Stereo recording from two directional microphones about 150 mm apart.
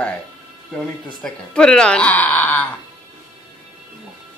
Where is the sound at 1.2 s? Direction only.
5° left (ahead or behind).